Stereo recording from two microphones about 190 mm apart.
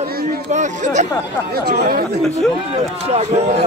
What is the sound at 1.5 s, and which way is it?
Speech, 55° right (ahead or behind).